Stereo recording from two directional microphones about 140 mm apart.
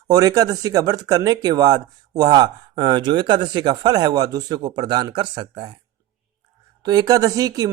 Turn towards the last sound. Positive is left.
turn(degrees=-25)  # may be behind; listen again after turning